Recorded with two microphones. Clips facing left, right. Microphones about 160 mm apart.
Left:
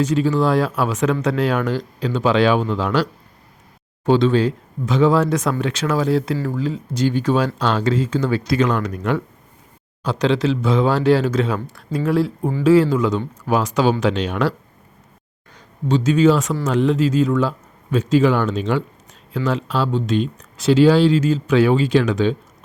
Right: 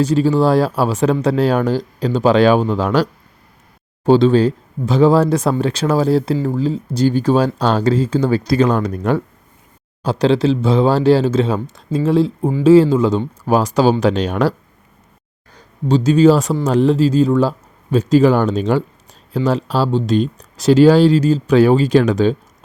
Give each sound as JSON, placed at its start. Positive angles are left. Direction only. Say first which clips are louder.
{"t": 0.0, "sound": "speech", "louder": "right 4 dB", "side_deg": -35}
{"t": 6.3, "sound": "speech", "louder": "right 4 dB", "side_deg": -20}
{"t": 6.6, "sound": "speech", "louder": "right 4 dB", "side_deg": -35}
{"t": 15.5, "sound": "speech", "louder": "right 3 dB", "side_deg": -35}